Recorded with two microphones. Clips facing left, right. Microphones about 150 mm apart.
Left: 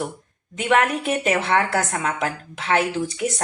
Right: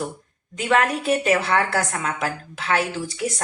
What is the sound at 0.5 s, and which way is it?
Speech, 25° left (ahead or behind).